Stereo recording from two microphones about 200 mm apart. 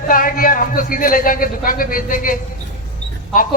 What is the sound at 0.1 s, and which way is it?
A man's voice, 45° left (ahead or behind).